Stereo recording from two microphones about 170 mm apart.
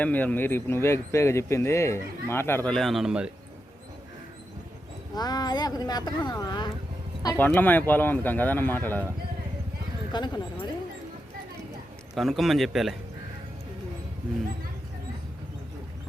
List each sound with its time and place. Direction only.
0.0 s speech: 10° left (ahead or behind)
5.1 s speech: 25° left (ahead or behind)
7.3 s speech: 10° left (ahead or behind)
10.1 s speech: 25° left (ahead or behind)
12.1 s speech: centre (ahead or behind)